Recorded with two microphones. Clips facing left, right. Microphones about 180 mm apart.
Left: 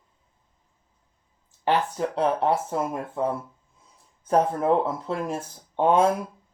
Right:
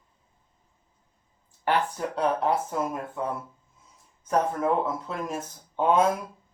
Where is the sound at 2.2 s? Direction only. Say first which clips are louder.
Left 1 dB; 25° left (ahead or behind).